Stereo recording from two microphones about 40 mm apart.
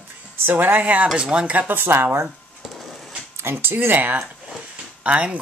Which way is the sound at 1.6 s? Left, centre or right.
Right.